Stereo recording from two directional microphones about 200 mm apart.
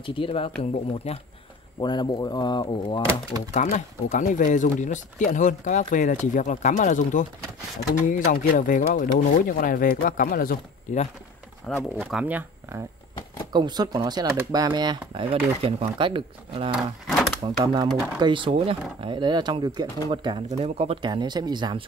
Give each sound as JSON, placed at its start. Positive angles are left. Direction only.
{"t": 0.0, "sound": "speech", "side_deg": 25}
{"t": 3.6, "sound": "speech", "side_deg": 40}
{"t": 11.6, "sound": "speech", "side_deg": 0}
{"t": 13.5, "sound": "speech", "side_deg": -20}
{"t": 16.7, "sound": "speech", "side_deg": 0}
{"t": 17.4, "sound": "speech", "side_deg": -20}